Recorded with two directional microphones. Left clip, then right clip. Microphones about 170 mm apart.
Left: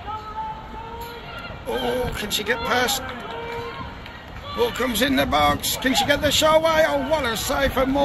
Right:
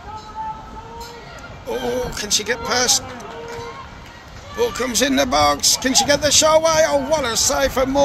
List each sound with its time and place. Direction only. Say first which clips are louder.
1.7 s speech: right 1 dB; 10° right (ahead or behind)
4.6 s speech: right 2 dB; 10° right (ahead or behind)